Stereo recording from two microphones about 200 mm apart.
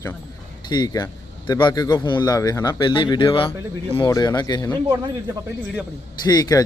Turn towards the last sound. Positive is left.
turn(degrees=20)  # may be behind; listen again after turning